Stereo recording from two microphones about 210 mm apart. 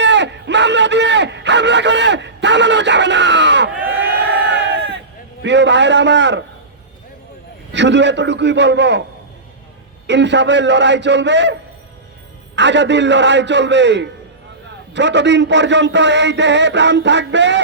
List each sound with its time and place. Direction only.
0.0 s a sound: 55° right (ahead or behind)
3.8 s crowd: 10° right (ahead or behind)
4.0 s crowd: 55° right (ahead or behind)
5.4 s a man's voice: 55° right (ahead or behind)
7.7 s a man's voice: 55° right (ahead or behind)
10.1 s a man's voice: 55° right (ahead or behind)
12.5 s a man's voice: 55° right (ahead or behind)